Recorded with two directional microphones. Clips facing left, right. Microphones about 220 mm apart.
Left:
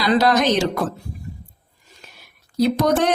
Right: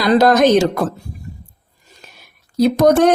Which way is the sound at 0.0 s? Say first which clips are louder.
Right 5 dB; 45° right (ahead or behind).